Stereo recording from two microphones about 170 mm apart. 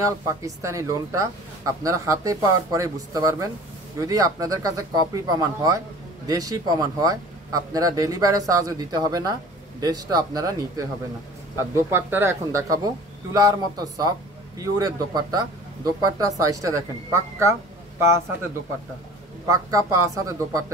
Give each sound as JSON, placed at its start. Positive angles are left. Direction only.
{"t": 0.6, "sound": "speech", "side_deg": -20}
{"t": 19.5, "sound": "speech", "side_deg": -20}